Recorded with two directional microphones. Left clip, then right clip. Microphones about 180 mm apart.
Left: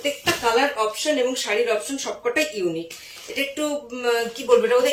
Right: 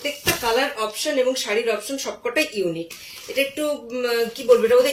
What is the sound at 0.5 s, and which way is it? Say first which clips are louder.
Speech: left 2 dB; 25° left (ahead or behind).